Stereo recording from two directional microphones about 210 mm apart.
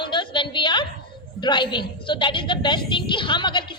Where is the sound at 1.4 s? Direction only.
20° left (ahead or behind).